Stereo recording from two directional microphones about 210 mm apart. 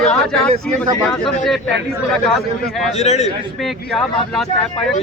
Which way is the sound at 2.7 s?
Centre (ahead or behind).